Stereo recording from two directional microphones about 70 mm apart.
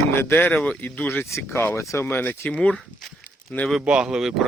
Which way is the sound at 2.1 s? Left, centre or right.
Left.